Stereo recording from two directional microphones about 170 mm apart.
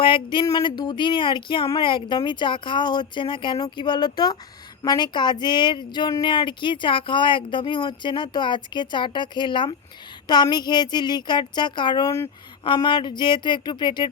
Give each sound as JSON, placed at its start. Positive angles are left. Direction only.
{"t": 0.0, "sound": "speech", "side_deg": 30}